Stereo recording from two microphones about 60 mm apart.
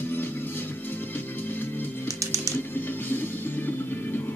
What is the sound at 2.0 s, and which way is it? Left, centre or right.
Music, right.